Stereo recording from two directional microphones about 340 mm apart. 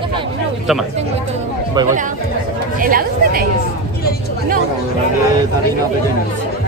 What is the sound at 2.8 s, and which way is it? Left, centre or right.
Chatter, right.